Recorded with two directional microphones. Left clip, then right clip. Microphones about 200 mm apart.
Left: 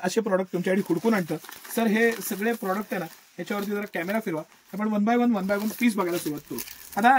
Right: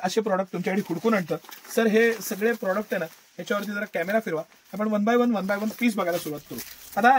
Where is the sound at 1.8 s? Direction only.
35° right (ahead or behind).